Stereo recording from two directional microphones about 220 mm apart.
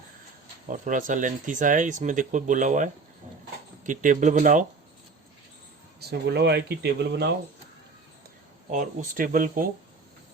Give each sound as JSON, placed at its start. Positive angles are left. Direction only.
{"t": 0.7, "sound": "speech", "side_deg": -35}
{"t": 6.0, "sound": "speech", "side_deg": -45}
{"t": 8.7, "sound": "speech", "side_deg": -35}